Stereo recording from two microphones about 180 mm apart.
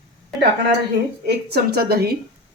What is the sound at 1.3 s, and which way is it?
Speech, 65° right (ahead or behind).